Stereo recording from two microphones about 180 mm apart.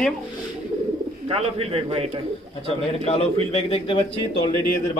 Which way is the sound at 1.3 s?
35° right (ahead or behind).